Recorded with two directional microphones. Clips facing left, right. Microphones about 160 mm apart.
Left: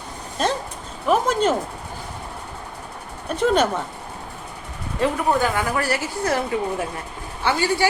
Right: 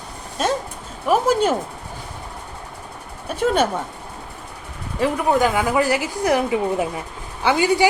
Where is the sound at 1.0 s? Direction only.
5° right (ahead or behind).